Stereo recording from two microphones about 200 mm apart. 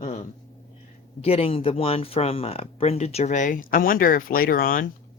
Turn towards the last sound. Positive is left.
turn(degrees=45)  # may be behind; listen again after turning